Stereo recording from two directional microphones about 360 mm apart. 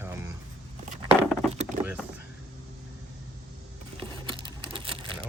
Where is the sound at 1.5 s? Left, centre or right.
Centre.